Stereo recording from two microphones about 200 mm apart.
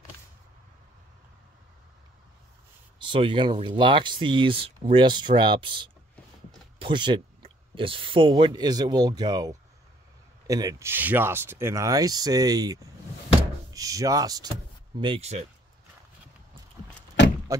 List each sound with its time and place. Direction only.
3.0 s speech: 25° right (ahead or behind)